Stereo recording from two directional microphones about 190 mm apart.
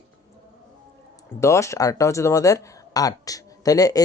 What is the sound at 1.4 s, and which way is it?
Speech, 15° left (ahead or behind).